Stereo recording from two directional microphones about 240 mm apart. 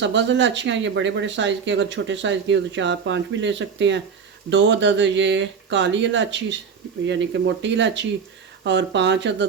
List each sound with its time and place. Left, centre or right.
0.0 s speech: right